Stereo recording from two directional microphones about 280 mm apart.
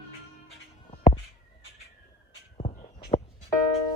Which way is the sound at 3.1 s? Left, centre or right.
Left.